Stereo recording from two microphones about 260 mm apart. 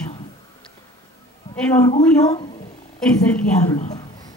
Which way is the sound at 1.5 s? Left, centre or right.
Centre.